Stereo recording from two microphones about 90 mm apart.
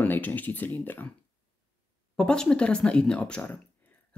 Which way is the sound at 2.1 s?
10° left (ahead or behind).